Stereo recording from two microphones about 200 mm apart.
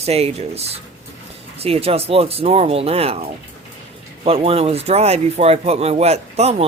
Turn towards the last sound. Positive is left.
turn(degrees=-30)  # may be behind; listen again after turning